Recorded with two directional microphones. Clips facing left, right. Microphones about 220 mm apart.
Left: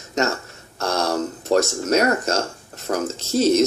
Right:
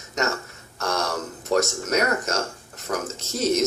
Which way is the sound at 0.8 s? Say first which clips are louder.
Left 5 dB; 30° left (ahead or behind).